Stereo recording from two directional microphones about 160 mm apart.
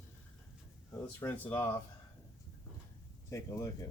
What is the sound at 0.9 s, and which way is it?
Speech, 15° left (ahead or behind).